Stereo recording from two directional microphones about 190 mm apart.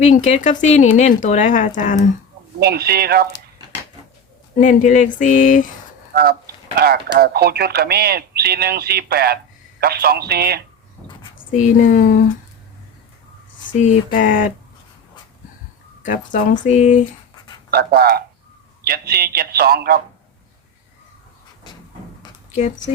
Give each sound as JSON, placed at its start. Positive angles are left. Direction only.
{"t": 0.0, "sound": "a woman's voice", "side_deg": 35}
{"t": 2.6, "sound": "speech", "side_deg": -55}
{"t": 4.5, "sound": "a woman's voice", "side_deg": 45}
{"t": 6.7, "sound": "speech", "side_deg": -55}
{"t": 11.5, "sound": "speech", "side_deg": 40}
{"t": 13.7, "sound": "speech", "side_deg": 40}
{"t": 16.0, "sound": "a woman's voice", "side_deg": 45}
{"t": 17.7, "sound": "speech", "side_deg": -55}